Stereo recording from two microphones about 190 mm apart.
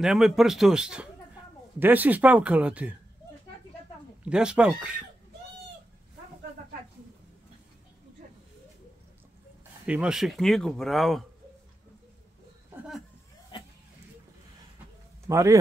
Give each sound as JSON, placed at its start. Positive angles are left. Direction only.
{"t": 0.0, "sound": "speech", "side_deg": 0}
{"t": 4.2, "sound": "speech", "side_deg": -5}
{"t": 9.8, "sound": "speech", "side_deg": -5}
{"t": 13.5, "sound": "a sound", "side_deg": 25}
{"t": 15.2, "sound": "speech", "side_deg": -15}